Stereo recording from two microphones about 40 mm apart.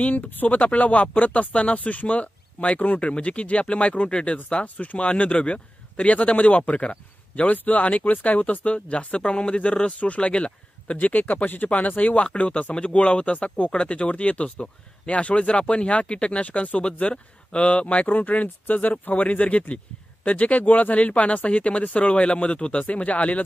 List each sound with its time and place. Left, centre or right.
0.1 s speech: left
12.2 s speech: left
18.1 s speech: left